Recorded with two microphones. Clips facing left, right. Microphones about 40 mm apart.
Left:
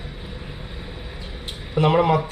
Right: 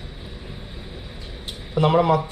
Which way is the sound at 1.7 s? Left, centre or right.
Left.